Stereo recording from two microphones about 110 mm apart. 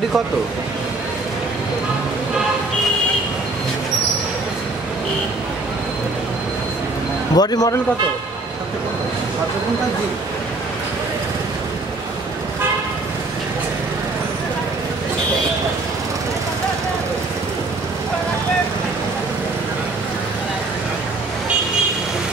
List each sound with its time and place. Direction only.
7.3 s a man's voice: 35° left (ahead or behind)